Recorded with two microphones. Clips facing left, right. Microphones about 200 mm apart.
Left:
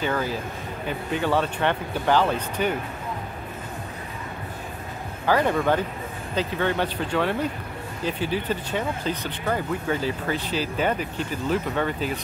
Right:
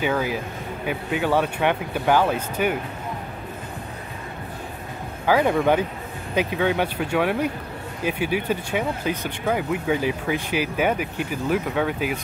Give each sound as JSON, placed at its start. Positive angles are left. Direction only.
{"t": 0.0, "sound": "speech", "side_deg": -10}
{"t": 5.2, "sound": "speech", "side_deg": -10}